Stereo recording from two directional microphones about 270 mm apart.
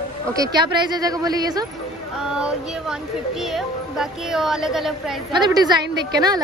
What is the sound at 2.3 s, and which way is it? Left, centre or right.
Speech, centre.